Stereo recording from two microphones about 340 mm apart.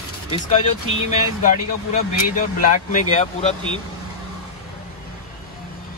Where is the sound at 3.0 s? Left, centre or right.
Centre.